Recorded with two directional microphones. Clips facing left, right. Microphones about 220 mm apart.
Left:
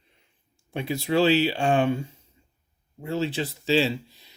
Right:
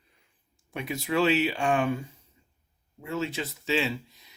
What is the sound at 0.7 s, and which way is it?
Speech, 30° left (ahead or behind).